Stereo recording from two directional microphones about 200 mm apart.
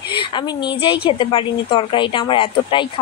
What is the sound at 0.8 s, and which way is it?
Speech, 25° left (ahead or behind).